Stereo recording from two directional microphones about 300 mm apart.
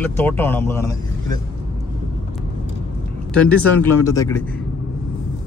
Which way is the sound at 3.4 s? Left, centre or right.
Centre.